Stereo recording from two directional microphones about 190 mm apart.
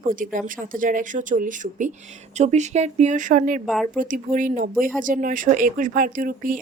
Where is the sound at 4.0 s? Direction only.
45° right (ahead or behind).